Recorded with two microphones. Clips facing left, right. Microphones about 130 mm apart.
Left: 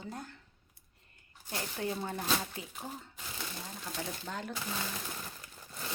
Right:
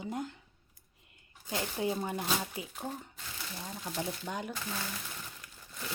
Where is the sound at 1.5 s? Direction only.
20° right (ahead or behind).